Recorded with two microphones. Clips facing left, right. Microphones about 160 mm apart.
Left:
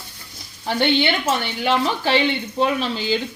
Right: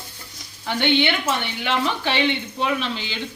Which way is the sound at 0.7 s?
35° left (ahead or behind).